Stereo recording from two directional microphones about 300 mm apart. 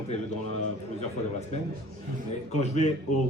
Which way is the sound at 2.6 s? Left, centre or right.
Left.